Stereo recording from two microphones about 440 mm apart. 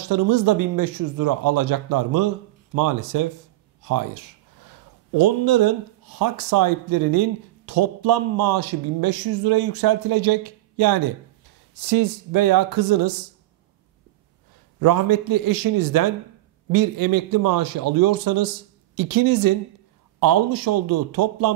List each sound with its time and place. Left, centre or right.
0.1 s speech: right
14.8 s speech: right